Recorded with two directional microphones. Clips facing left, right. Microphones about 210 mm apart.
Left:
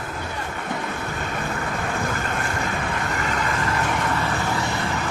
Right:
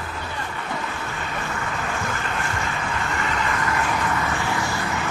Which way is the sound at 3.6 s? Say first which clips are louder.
Even; 30° left (ahead or behind).